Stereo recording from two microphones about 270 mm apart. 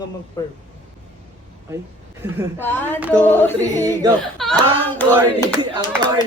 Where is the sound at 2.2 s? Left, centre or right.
Centre.